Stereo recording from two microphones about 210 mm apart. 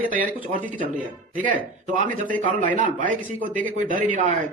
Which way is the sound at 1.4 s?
40° right (ahead or behind).